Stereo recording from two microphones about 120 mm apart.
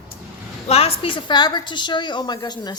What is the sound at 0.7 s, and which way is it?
Speech, 55° left (ahead or behind).